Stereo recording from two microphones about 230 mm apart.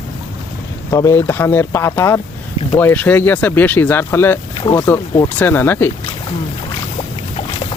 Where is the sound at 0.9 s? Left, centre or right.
Centre.